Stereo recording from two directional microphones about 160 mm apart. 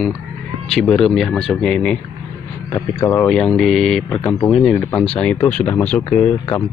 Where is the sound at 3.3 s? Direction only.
5° left (ahead or behind).